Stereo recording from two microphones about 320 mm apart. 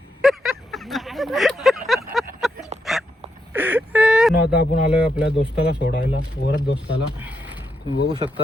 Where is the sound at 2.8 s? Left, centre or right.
Centre.